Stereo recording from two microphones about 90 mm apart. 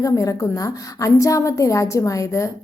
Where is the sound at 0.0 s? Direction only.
40° left (ahead or behind).